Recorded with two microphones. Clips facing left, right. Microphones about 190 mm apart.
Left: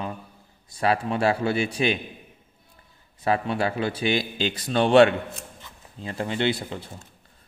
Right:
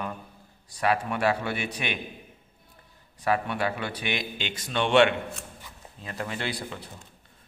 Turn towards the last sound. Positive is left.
turn(degrees=25)  # may be behind; listen again after turning